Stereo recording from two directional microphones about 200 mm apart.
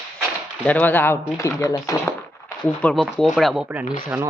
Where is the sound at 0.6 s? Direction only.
10° left (ahead or behind).